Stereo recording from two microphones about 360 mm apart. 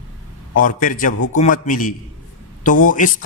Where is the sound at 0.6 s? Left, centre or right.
Left.